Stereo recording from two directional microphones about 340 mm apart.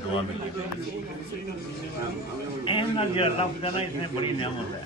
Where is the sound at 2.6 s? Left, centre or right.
Centre.